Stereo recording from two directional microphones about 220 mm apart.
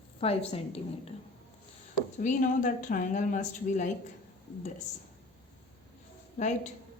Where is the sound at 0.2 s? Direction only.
25° left (ahead or behind).